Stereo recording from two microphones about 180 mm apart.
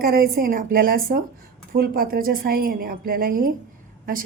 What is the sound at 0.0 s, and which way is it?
A woman's voice, 55° right (ahead or behind).